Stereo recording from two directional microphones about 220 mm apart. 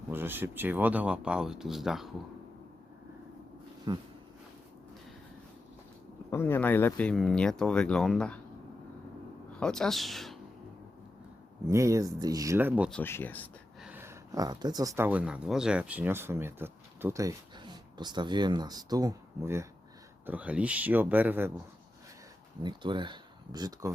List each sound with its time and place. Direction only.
0.1 s speech: 10° right (ahead or behind)
3.9 s speech: 20° right (ahead or behind)
6.3 s speech: 10° left (ahead or behind)
9.6 s speech: 5° left (ahead or behind)
11.6 s speech: 15° right (ahead or behind)
12.9 s speech: 10° left (ahead or behind)
13.8 s speech: 10° right (ahead or behind)
22.6 s speech: 20° right (ahead or behind)